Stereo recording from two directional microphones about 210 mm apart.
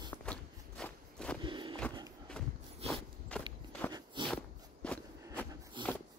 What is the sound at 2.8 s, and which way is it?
Walk, 30° right (ahead or behind).